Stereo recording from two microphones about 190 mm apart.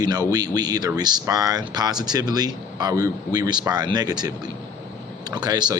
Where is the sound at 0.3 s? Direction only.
20° right (ahead or behind).